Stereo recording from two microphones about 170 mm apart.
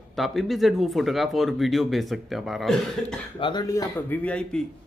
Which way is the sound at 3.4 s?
25° left (ahead or behind).